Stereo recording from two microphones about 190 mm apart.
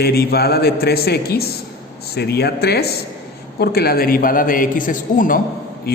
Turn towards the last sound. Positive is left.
turn(degrees=55)  # may be behind; listen again after turning